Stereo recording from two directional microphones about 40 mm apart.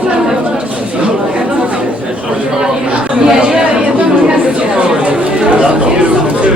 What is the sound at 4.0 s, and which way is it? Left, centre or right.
Chatter, right.